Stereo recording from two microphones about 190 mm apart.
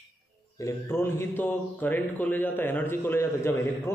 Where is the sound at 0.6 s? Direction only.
15° left (ahead or behind).